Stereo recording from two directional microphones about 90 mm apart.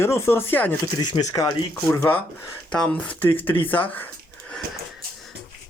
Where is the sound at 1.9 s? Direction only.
25° left (ahead or behind).